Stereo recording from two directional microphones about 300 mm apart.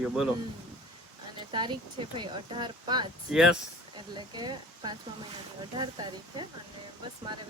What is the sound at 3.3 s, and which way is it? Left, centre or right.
Speech, centre.